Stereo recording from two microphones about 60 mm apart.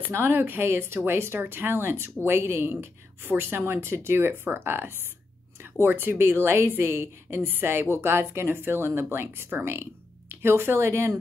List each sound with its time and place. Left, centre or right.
0.0 s speech: right